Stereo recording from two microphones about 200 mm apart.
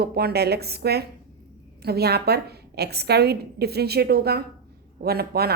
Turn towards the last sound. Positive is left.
turn(degrees=-50)  # may be behind; listen again after turning